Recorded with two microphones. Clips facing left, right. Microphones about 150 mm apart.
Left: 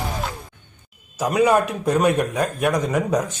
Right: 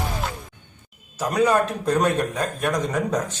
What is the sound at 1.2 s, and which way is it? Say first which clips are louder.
Speech: left 2 dB; 10° left (ahead or behind).